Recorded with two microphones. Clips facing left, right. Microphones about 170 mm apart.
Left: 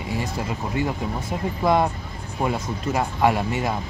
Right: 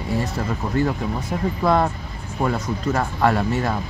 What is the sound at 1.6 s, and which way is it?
Speech, 15° left (ahead or behind).